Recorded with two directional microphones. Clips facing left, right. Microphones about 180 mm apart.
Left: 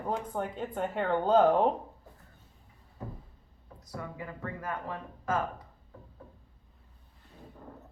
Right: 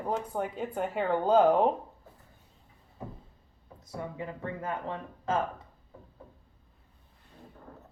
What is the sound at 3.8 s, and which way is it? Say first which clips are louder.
Speech: right 3 dB; 25° right (ahead or behind).